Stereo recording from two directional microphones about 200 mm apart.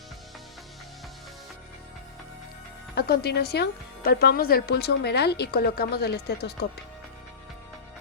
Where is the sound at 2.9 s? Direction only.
55° left (ahead or behind).